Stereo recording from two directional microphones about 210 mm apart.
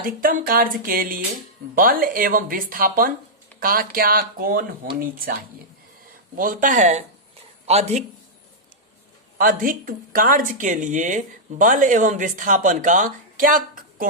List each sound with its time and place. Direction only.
0.0 s speech: 40° right (ahead or behind)
9.4 s speech: 40° right (ahead or behind)